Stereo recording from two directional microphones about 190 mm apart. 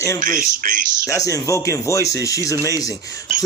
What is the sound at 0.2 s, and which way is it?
Speech, 45° right (ahead or behind).